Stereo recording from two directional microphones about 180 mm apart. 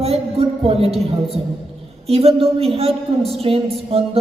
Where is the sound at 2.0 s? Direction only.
35° right (ahead or behind).